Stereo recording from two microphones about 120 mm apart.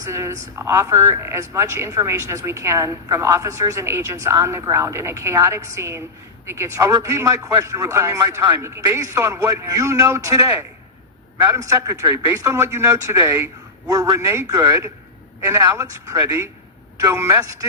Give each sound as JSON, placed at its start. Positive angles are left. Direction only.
{"t": 0.0, "sound": "speech", "side_deg": -25}
{"t": 11.5, "sound": "speech", "side_deg": -25}